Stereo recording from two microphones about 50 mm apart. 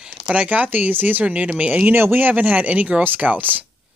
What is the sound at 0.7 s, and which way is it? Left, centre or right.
A woman's voice, right.